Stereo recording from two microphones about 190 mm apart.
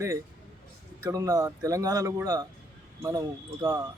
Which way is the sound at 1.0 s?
20° right (ahead or behind).